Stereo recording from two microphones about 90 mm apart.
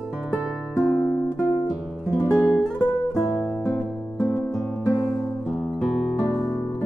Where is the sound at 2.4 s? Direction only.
Centre (ahead or behind).